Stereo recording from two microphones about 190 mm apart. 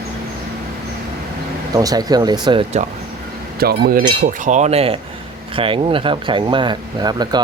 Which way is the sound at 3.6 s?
50° right (ahead or behind).